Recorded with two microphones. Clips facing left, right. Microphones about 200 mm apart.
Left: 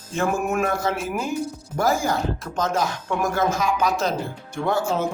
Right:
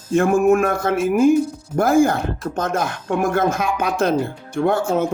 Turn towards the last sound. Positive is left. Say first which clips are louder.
# right 5 dB
turn(degrees=-55)  # may be behind; listen again after turning